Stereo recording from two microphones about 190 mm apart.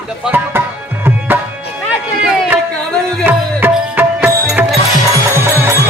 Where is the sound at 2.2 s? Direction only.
5° right (ahead or behind).